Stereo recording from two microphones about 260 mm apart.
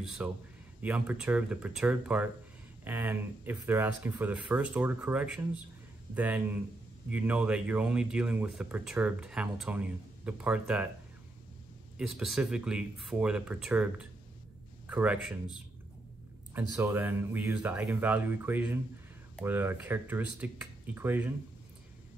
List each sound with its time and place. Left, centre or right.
0.0 s speech: centre
12.0 s speech: centre
16.5 s speech: centre